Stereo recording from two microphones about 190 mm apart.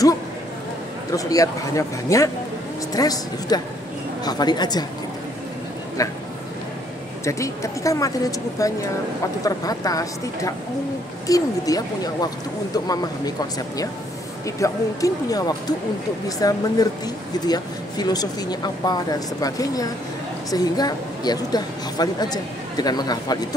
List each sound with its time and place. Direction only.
1.1 s a woman's voice: 15° left (ahead or behind)
6.0 s speech: 15° left (ahead or behind)
7.2 s a woman's voice: 15° left (ahead or behind)